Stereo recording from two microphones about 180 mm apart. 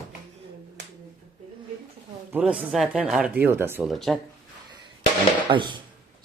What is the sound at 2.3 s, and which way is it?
Speech, 5° right (ahead or behind).